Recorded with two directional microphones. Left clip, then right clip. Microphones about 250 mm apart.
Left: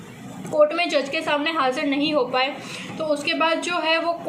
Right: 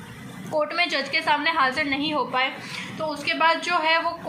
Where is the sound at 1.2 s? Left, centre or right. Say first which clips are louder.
Right 1 dB; centre.